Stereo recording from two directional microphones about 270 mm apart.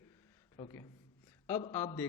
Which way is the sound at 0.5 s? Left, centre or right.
Centre.